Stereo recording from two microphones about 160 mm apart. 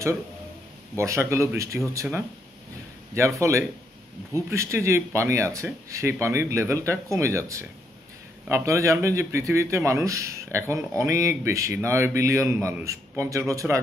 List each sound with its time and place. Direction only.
0.9 s speech: 20° right (ahead or behind)
3.2 s speech: 20° right (ahead or behind)